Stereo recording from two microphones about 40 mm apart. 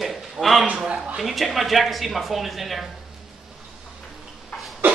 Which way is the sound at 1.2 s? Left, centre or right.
Centre.